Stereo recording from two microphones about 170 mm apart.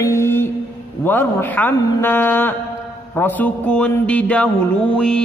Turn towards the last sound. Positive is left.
turn(degrees=5)  # may be behind; listen again after turning